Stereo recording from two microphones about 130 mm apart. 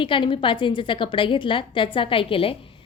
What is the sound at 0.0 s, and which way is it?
A woman's voice, 40° left (ahead or behind).